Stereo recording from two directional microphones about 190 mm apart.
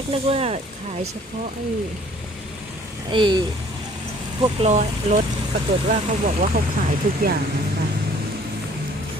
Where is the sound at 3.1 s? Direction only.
25° right (ahead or behind).